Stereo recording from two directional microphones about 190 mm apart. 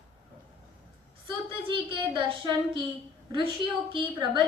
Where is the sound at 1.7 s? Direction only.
25° right (ahead or behind).